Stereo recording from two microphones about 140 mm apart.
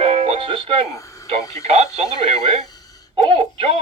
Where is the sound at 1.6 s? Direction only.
50° right (ahead or behind).